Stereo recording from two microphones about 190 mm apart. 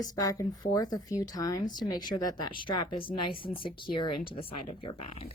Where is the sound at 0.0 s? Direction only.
20° left (ahead or behind).